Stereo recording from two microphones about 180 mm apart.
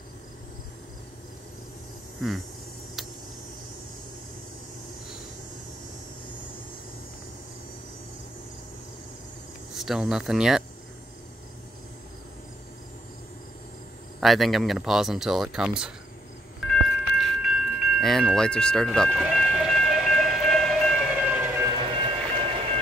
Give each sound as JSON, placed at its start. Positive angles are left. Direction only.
{"t": 9.8, "sound": "speech", "side_deg": 0}
{"t": 14.2, "sound": "speech", "side_deg": 0}
{"t": 16.9, "sound": "a sound", "side_deg": -5}
{"t": 21.9, "sound": "train", "side_deg": -30}